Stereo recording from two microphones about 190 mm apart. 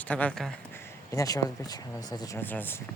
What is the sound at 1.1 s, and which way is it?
Speech, 20° left (ahead or behind).